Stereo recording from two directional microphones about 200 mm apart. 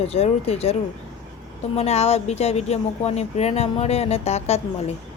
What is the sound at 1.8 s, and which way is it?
A woman's voice, 30° left (ahead or behind).